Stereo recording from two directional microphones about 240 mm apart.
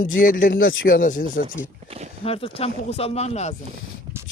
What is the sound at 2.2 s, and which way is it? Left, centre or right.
Speech, left.